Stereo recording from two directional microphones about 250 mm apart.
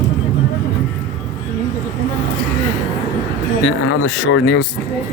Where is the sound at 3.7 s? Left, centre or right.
Left.